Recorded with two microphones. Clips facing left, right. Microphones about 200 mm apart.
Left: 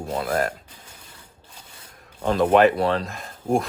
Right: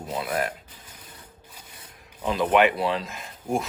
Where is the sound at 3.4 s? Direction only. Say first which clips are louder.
Left 5 dB; 25° left (ahead or behind).